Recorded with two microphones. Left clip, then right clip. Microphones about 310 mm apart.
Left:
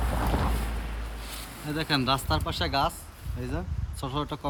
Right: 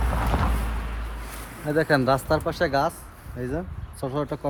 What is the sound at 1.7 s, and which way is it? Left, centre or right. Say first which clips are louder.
Speech: right 6 dB; centre.